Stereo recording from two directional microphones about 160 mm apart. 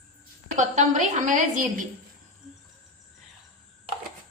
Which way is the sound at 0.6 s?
50° right (ahead or behind).